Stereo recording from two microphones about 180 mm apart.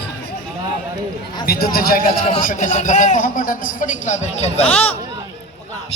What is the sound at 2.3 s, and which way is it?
A man's voice, 40° left (ahead or behind).